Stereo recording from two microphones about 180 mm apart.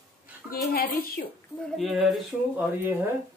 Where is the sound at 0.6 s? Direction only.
55° left (ahead or behind).